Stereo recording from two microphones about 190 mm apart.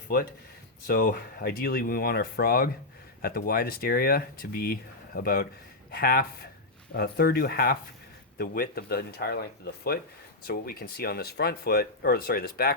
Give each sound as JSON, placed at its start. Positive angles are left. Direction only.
{"t": 0.1, "sound": "speech", "side_deg": 50}